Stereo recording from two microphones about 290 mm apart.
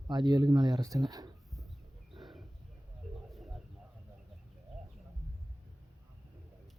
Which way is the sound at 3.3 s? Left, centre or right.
Centre.